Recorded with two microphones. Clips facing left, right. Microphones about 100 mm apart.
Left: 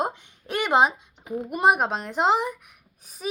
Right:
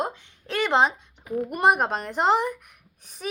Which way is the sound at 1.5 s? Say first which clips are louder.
Left 1 dB; centre (ahead or behind).